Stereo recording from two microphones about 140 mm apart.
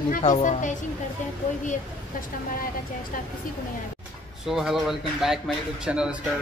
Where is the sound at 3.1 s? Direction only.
80° left.